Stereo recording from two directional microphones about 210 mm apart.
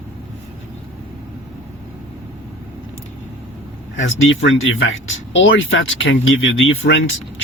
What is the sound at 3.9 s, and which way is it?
Speech, 65° left (ahead or behind).